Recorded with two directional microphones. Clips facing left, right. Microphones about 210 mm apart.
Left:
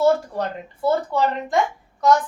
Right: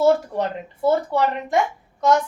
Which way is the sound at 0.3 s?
20° right (ahead or behind).